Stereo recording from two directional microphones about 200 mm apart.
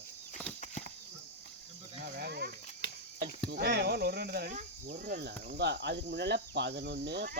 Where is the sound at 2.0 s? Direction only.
50° right (ahead or behind).